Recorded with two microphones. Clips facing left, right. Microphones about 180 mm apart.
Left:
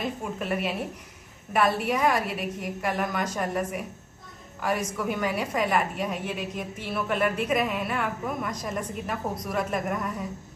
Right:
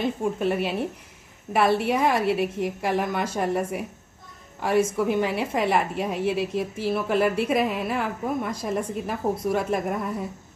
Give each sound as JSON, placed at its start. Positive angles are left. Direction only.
{"t": 0.0, "sound": "a woman's voice", "side_deg": -30}